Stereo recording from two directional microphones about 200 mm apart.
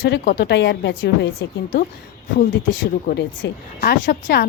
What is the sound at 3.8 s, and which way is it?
Speech, 45° left (ahead or behind).